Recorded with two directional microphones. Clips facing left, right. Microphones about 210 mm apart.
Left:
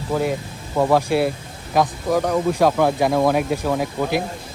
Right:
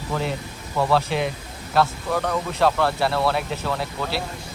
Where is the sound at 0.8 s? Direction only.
15° left (ahead or behind).